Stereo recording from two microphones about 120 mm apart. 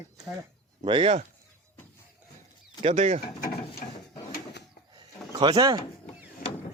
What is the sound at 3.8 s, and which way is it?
Drawer open or close, 90° left.